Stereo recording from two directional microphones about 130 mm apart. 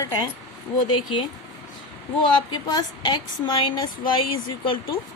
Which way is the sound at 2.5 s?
35° left (ahead or behind).